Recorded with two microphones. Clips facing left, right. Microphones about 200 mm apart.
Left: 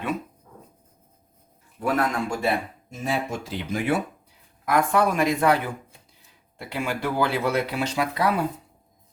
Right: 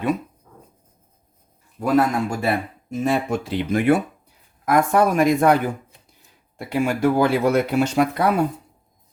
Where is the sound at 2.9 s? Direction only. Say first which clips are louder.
Right 7 dB; 60° right (ahead or behind).